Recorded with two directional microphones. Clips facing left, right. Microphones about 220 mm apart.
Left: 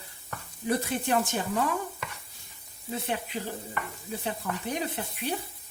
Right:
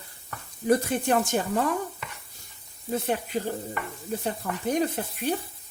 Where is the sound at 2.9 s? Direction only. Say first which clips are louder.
Right 5 dB; 45° right (ahead or behind).